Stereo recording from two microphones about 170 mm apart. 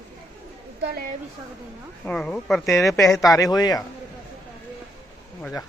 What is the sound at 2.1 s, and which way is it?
Speech, 5° left (ahead or behind).